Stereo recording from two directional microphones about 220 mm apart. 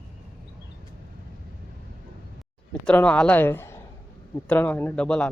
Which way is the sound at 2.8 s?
5° left (ahead or behind).